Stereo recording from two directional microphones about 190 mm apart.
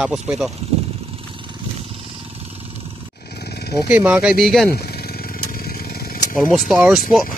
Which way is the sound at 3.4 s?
60° left (ahead or behind).